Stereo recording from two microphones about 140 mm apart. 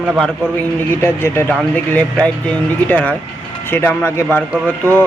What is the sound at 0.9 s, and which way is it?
Speech, 15° left (ahead or behind).